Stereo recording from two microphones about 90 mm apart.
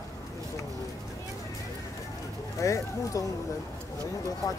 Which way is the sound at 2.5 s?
35° left (ahead or behind).